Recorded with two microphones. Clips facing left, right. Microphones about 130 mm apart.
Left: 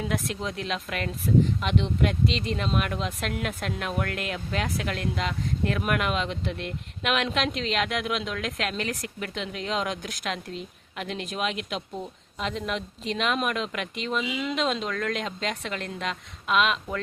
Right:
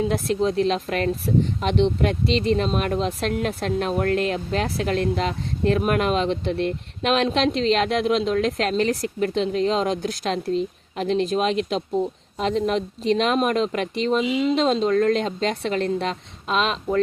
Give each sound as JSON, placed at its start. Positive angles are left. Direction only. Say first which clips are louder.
{"t": 0.0, "sound": "speech", "louder": "right 8 dB", "side_deg": -30}